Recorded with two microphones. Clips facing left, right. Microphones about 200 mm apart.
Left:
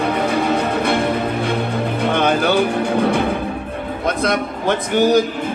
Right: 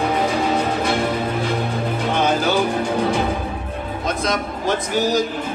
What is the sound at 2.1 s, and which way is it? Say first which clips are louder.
Music: left 2 dB; 60° left (ahead or behind).